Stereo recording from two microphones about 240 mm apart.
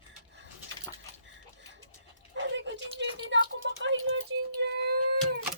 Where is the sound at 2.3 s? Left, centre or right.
Right.